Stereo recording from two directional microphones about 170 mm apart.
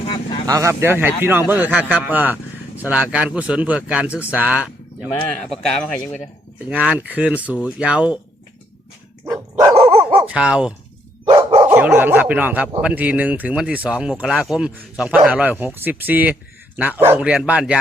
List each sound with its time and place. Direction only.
0.4 s speech: 20° right (ahead or behind)
5.3 s speech: 5° left (ahead or behind)
6.7 s speech: 5° right (ahead or behind)
9.2 s dog: 20° right (ahead or behind)
9.7 s dog: 35° right (ahead or behind)
10.2 s speech: 5° right (ahead or behind)
11.3 s dog: 25° right (ahead or behind)
11.8 s speech: 10° right (ahead or behind)